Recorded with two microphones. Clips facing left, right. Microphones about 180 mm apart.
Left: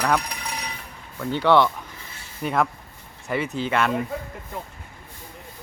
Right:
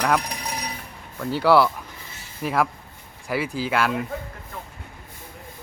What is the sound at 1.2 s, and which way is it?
Speech, 5° right (ahead or behind).